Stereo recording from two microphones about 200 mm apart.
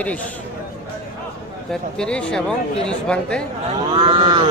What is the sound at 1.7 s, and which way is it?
Speech, 5° left (ahead or behind).